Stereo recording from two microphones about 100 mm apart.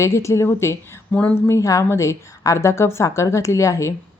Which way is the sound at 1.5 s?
30° left (ahead or behind).